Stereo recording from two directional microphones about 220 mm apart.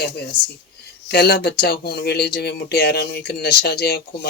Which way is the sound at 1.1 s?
45° left (ahead or behind).